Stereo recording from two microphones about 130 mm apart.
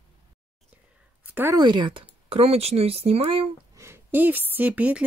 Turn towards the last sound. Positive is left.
turn(degrees=-10)  # may be behind; listen again after turning